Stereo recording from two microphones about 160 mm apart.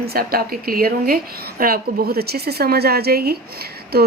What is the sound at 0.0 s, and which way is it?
A woman's voice, 75° right (ahead or behind).